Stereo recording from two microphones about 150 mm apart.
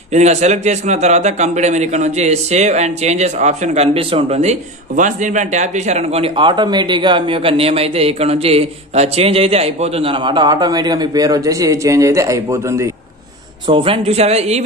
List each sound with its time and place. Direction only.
0.1 s a man's voice: 50° right (ahead or behind); by 12.9 s 20° right (ahead or behind)
13.7 s a man's voice: 35° right (ahead or behind)